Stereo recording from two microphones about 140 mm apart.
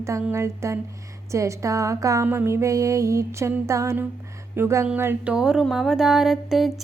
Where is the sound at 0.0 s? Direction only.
20° right (ahead or behind).